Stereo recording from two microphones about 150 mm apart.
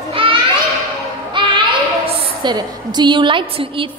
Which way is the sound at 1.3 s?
30° right (ahead or behind).